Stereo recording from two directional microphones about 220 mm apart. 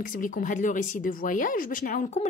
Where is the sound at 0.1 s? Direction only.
40° left (ahead or behind).